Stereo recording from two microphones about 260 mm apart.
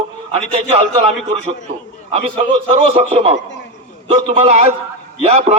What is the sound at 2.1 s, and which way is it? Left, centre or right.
A man's voice, right.